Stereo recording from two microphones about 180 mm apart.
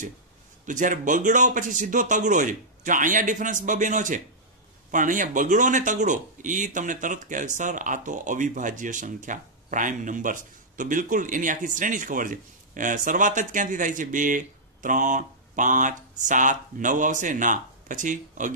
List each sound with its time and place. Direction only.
0.7 s speech: 45° right (ahead or behind)